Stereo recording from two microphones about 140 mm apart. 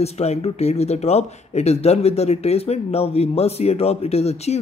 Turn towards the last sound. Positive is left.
turn(degrees=50)  # may be behind; listen again after turning